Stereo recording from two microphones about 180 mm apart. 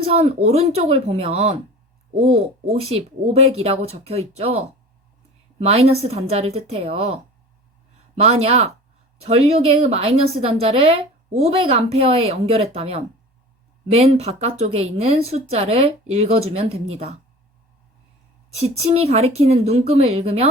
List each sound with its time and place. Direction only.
0.1 s a woman's voice: 35° right (ahead or behind)
8.2 s a woman's voice: 35° right (ahead or behind)
18.6 s a woman's voice: 35° right (ahead or behind)